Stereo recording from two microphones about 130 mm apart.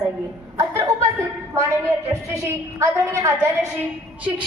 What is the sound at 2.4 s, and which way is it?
A woman's voice, 25° right (ahead or behind).